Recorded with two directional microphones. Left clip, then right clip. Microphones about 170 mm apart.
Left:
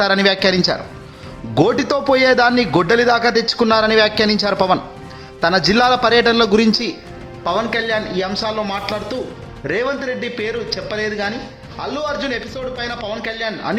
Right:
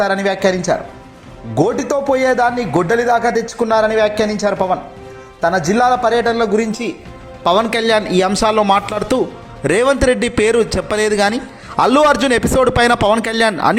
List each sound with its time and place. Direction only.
0.0 s a man's voice: 15° left (ahead or behind)
7.4 s a man's voice: 25° right (ahead or behind); by 13.7 s 50° right (ahead or behind)